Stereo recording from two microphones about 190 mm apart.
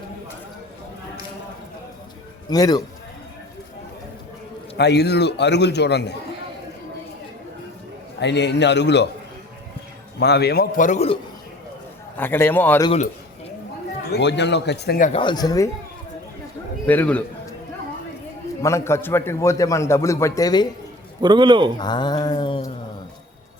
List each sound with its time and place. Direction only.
2.5 s mantra: 20° left (ahead or behind)
4.8 s a man's voice: 60° left (ahead or behind)
8.2 s a man's voice: 65° left (ahead or behind)
10.2 s a man's voice: 60° left (ahead or behind); by 11.2 s 35° left (ahead or behind)
12.1 s a man's voice: 10° left (ahead or behind)
14.1 s a man's voice: 65° left (ahead or behind)
15.1 s mantra: 25° left (ahead or behind)
16.8 s a man's voice: 10° left (ahead or behind)
18.6 s a man's voice: 15° left (ahead or behind)
21.2 s a man's voice: 25° right (ahead or behind)
21.8 s mantra: 20° left (ahead or behind)